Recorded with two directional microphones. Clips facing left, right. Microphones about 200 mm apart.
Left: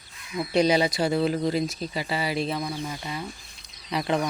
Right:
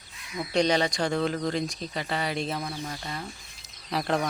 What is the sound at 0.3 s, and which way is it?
Speech, 5° left (ahead or behind).